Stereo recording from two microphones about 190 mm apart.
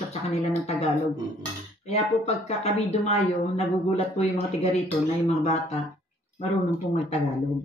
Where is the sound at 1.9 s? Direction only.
35° left (ahead or behind).